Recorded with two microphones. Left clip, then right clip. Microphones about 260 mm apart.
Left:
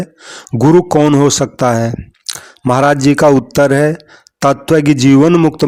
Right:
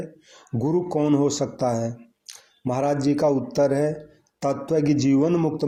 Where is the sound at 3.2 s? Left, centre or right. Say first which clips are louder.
Left 12 dB; left.